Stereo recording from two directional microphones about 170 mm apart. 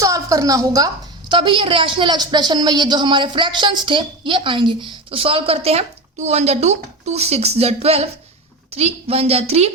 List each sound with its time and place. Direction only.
0.0 s a woman's voice: 20° right (ahead or behind)
1.3 s a woman's voice: 30° right (ahead or behind)